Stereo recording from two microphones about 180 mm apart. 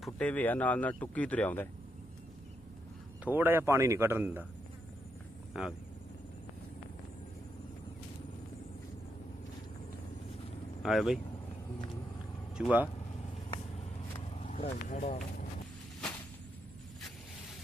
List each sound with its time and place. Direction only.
0.0 s speech: 5° left (ahead or behind)
3.3 s speech: 10° right (ahead or behind)
10.8 s speech: centre (ahead or behind)
12.5 s speech: 5° right (ahead or behind)
13.3 s vehicle: 35° left (ahead or behind)
14.3 s speech: 40° left (ahead or behind)